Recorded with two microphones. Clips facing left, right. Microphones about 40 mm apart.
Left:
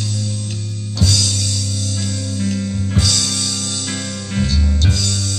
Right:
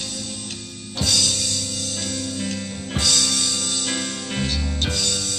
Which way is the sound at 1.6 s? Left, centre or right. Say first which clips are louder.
Left 4 dB; right.